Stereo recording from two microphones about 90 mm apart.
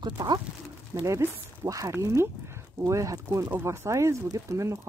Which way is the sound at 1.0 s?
35° right (ahead or behind).